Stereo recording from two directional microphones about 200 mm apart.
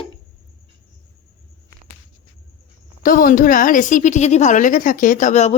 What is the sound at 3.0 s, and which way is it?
A woman's voice, 45° left (ahead or behind).